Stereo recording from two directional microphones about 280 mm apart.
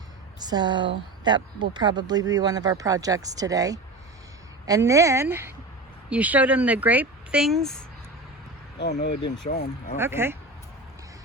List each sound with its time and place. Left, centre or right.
0.3 s a woman's voice: centre
8.8 s speech: left
10.0 s a woman's voice: centre